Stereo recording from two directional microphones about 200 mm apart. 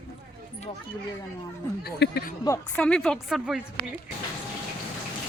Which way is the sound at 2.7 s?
5° left (ahead or behind).